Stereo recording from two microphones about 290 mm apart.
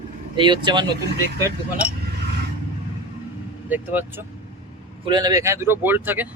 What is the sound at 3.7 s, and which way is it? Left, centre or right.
Speech, centre.